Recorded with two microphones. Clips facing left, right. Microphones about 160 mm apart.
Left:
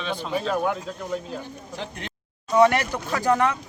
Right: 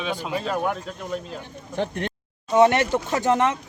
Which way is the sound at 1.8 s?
50° right (ahead or behind).